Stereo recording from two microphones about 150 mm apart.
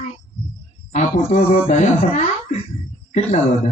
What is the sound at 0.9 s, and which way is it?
A man's voice, 45° left (ahead or behind).